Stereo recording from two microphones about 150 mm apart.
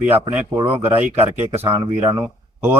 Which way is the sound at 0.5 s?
15° right (ahead or behind).